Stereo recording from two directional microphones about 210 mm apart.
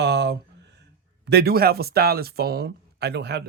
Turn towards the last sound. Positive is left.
turn(degrees=-50)  # may be behind; listen again after turning